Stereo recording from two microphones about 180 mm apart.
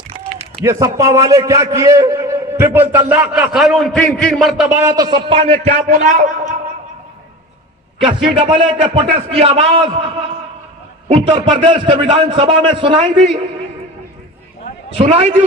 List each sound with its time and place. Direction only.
0.6 s a man's voice: 15° right (ahead or behind); by 4.6 s centre (ahead or behind)
4.8 s a man's voice: 20° right (ahead or behind)
6.0 s a man's voice: 45° right (ahead or behind)
8.0 s speech: 30° right (ahead or behind)
12.1 s a man's voice: 30° right (ahead or behind)
14.9 s speech: 35° right (ahead or behind)